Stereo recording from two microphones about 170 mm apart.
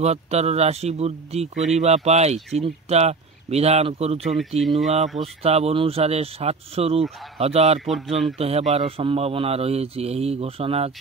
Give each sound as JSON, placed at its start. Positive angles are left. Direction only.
{"t": 0.0, "sound": "a man's voice", "side_deg": -40}
{"t": 4.4, "sound": "speech", "side_deg": 0}
{"t": 4.8, "sound": "a man's voice", "side_deg": -45}
{"t": 7.8, "sound": "speech", "side_deg": 0}
{"t": 8.4, "sound": "a man's voice", "side_deg": -35}